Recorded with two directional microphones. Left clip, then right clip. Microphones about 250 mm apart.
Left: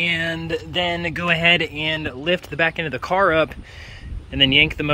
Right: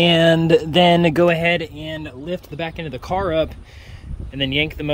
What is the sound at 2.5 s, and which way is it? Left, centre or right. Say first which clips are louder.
Speech: left 7 dB; centre.